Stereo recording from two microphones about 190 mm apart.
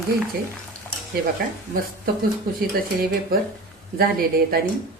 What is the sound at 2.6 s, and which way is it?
Speech, 50° right (ahead or behind).